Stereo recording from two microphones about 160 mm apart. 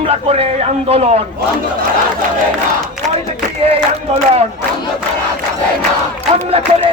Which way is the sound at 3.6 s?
40° right (ahead or behind).